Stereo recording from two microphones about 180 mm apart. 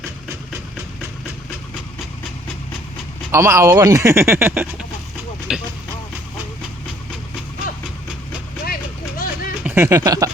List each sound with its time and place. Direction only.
3.3 s speech: 15° right (ahead or behind)
8.6 s vehicle: 55° left (ahead or behind)
9.6 s speech: 10° right (ahead or behind)